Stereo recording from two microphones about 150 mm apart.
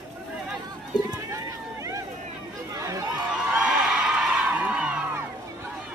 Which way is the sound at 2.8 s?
20° right (ahead or behind).